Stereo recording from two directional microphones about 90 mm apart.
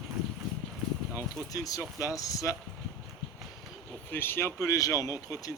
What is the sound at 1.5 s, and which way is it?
Speech, 40° left (ahead or behind).